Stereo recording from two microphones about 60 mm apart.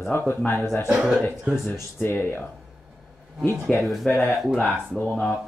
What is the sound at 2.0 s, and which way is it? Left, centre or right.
Speech, left.